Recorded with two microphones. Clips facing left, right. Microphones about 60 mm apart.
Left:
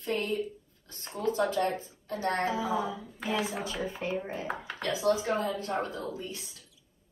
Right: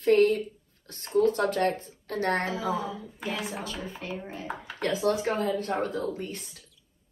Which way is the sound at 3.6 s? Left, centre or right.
Left.